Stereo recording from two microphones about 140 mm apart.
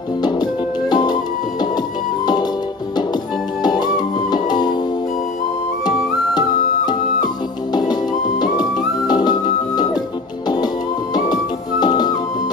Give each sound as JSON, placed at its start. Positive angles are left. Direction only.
{"t": 0.2, "sound": "music", "side_deg": 30}
{"t": 3.6, "sound": "music", "side_deg": 30}
{"t": 7.7, "sound": "music", "side_deg": 30}
{"t": 11.8, "sound": "music", "side_deg": 30}